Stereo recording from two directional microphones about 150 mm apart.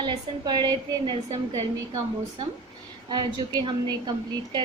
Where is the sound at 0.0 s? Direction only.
30° right (ahead or behind).